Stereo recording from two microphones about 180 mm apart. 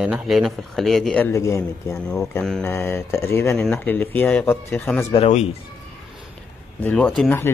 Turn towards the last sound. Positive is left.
turn(degrees=5)  # may be behind; listen again after turning